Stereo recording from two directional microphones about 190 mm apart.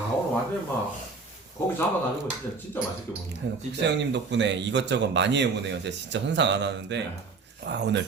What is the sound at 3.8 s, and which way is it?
Speech, 65° right (ahead or behind).